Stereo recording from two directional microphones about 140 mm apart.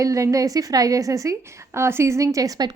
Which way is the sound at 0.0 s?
25° right (ahead or behind).